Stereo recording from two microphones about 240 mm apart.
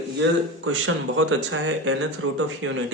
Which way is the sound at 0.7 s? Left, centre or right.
Right.